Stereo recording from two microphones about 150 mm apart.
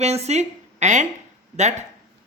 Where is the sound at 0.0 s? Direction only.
45° right (ahead or behind).